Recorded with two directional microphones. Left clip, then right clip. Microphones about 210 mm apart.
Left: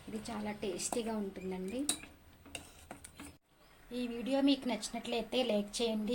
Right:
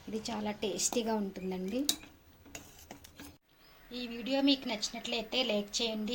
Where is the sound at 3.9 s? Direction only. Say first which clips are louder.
Right 1 dB; 5° left (ahead or behind).